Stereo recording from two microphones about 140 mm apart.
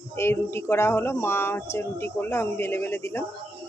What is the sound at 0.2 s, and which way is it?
Speech, 20° left (ahead or behind).